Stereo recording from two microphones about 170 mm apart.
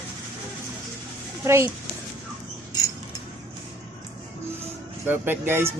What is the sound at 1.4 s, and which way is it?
Speech, 15° right (ahead or behind).